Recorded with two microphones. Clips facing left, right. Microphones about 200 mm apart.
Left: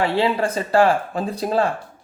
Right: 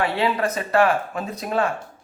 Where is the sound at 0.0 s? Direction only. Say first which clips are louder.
Left 2 dB; 25° left (ahead or behind).